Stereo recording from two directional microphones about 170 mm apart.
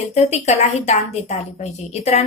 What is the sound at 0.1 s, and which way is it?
Speech, 40° left (ahead or behind).